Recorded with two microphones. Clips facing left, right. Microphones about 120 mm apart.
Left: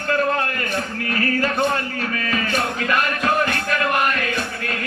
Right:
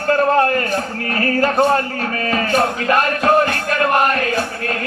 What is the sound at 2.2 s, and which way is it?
Music, 35° right (ahead or behind).